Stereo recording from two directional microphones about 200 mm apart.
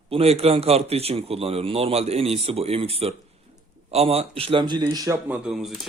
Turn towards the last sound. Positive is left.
turn(degrees=0)  # may be behind; listen again after turning